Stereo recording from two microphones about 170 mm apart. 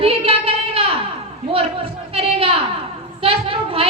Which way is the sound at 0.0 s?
35° right (ahead or behind).